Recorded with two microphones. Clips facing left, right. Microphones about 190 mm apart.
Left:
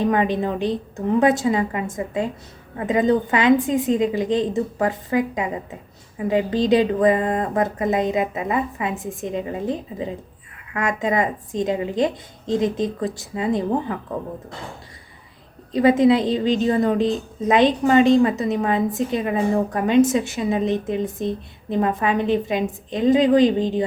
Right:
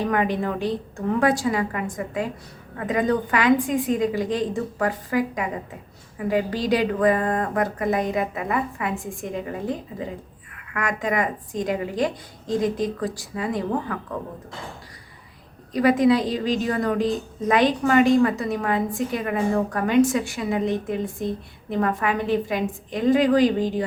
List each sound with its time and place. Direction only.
0.0 s a woman's voice: 20° left (ahead or behind)
15.7 s a woman's voice: 25° left (ahead or behind)